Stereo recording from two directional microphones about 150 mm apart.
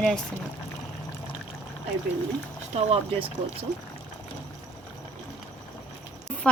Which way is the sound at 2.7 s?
40° right (ahead or behind).